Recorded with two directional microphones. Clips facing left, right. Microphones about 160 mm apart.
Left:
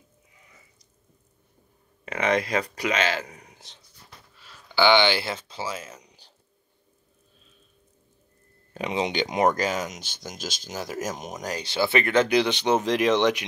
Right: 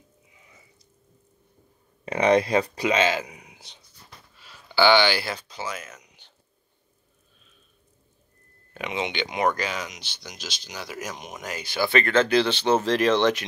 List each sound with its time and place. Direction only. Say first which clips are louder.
2.3 s speech: right 4 dB; 30° right (ahead or behind); by 3.8 s 5° right (ahead or behind)
4.7 s speech: right 1 dB; 20° left (ahead or behind)
8.7 s speech: left 3 dB; 35° left (ahead or behind); by 13.5 s 15° left (ahead or behind)